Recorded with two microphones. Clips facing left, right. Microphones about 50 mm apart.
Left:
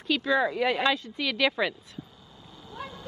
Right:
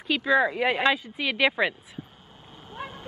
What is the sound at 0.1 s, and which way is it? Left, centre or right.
Speech, centre.